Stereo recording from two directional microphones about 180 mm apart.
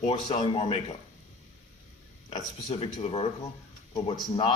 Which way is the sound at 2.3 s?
35° left (ahead or behind).